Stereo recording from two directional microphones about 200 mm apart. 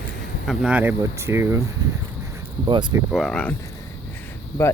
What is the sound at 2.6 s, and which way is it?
Speech, 25° right (ahead or behind).